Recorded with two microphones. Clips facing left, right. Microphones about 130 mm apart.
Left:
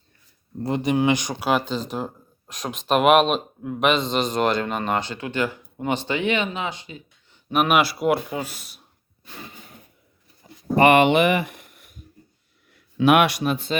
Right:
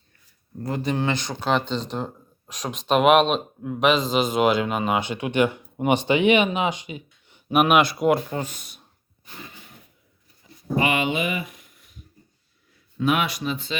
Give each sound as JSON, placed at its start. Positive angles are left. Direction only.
{"t": 0.6, "sound": "speech", "side_deg": 20}
{"t": 7.5, "sound": "speech", "side_deg": 0}
{"t": 10.4, "sound": "a sound", "side_deg": 60}
{"t": 12.7, "sound": "a man's voice", "side_deg": 70}